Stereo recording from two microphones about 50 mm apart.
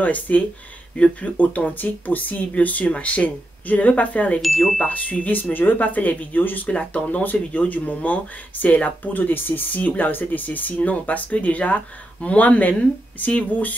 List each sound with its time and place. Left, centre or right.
0.0 s speech: left